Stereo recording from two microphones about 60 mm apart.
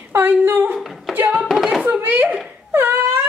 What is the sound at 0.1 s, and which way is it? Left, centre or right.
Speech, right.